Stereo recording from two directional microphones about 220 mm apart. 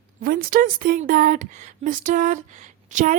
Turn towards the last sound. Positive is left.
turn(degrees=-35)  # may be behind; listen again after turning